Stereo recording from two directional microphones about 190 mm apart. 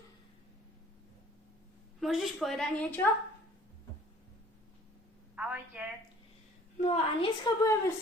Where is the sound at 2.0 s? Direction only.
Centre (ahead or behind).